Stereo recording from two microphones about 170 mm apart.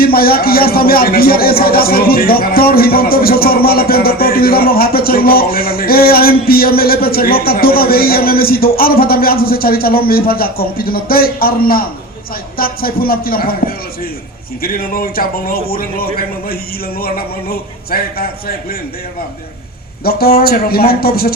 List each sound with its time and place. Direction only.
0.0 s speech: 60° left (ahead or behind)
20.1 s speech: 65° left (ahead or behind)